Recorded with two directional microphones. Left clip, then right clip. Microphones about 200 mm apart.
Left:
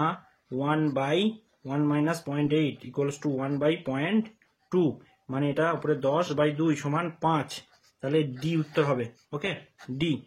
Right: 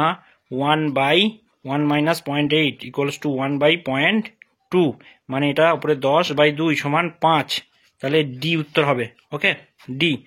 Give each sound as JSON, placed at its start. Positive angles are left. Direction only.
{"t": 0.0, "sound": "speech", "side_deg": -40}